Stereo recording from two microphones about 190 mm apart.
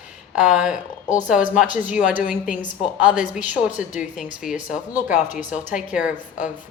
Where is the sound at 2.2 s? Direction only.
45° left (ahead or behind).